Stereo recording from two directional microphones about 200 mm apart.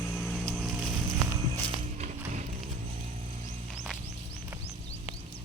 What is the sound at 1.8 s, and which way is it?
Clip-clop, 35° right (ahead or behind).